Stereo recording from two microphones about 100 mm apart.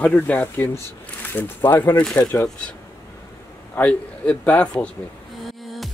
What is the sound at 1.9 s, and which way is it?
A man's voice, 10° left (ahead or behind).